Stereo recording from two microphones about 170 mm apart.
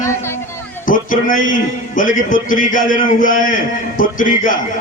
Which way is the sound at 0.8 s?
50° left (ahead or behind).